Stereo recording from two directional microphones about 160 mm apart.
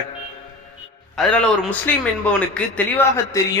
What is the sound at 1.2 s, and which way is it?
A man's voice, 10° left (ahead or behind).